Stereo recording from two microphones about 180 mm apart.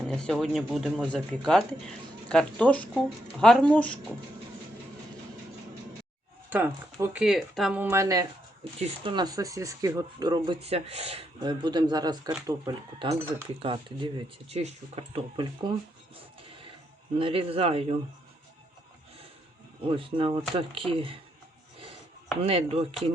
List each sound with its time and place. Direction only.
0.1 s speech: 5° left (ahead or behind)
6.5 s speech: 10° right (ahead or behind)
13.6 s speech: 30° right (ahead or behind)
15.1 s speech: 25° right (ahead or behind)
17.2 s a man's voice: 30° right (ahead or behind)
19.9 s speech: 30° right (ahead or behind)
22.4 s a man's voice: 30° right (ahead or behind)